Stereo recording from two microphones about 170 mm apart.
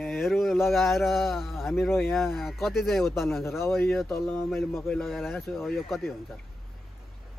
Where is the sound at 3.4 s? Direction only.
15° left (ahead or behind).